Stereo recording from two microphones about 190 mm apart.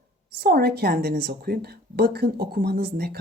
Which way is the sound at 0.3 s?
55° right (ahead or behind).